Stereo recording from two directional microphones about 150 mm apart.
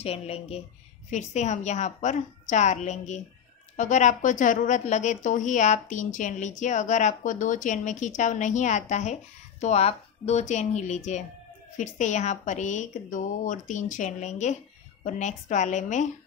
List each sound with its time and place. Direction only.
0.0 s a woman's voice: 45° left (ahead or behind)